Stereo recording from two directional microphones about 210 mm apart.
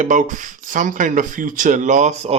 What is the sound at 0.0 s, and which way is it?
Speech, 40° right (ahead or behind).